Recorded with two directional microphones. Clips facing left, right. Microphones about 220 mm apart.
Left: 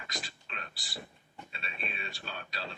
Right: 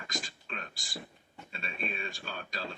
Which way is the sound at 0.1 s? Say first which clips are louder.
Right 4 dB; 45° right (ahead or behind).